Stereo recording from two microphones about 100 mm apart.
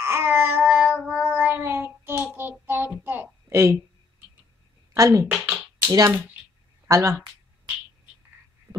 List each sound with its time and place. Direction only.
0.0 s child singing: 25° right (ahead or behind)
3.0 s a sound: 20° right (ahead or behind)
4.9 s a woman's voice: 30° right (ahead or behind)
5.9 s speech: 45° right (ahead or behind)
6.9 s speech: 30° right (ahead or behind)